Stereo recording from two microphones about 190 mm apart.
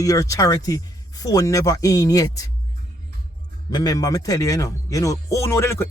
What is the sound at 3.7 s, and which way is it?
A man's voice, 20° left (ahead or behind).